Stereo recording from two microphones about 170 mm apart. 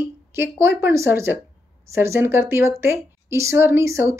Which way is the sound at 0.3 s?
15° right (ahead or behind).